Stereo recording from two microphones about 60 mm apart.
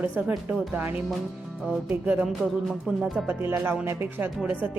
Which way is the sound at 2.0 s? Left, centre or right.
Right.